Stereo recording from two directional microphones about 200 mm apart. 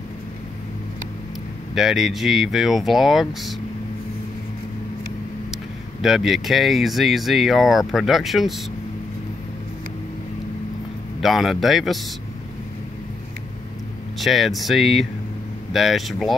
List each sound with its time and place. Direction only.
1.8 s speech: centre (ahead or behind)
6.0 s speech: centre (ahead or behind)
11.1 s speech: centre (ahead or behind)
14.1 s speech: centre (ahead or behind)